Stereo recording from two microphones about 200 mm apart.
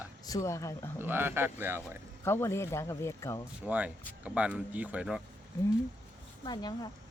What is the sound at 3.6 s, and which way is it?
Speech, 5° right (ahead or behind).